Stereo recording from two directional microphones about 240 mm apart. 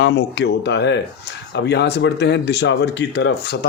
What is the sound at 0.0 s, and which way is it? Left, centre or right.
Speech, left.